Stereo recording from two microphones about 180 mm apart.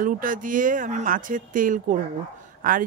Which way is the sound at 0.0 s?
50° right (ahead or behind).